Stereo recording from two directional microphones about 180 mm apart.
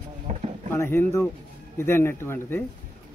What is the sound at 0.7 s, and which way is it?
Speech, 15° left (ahead or behind).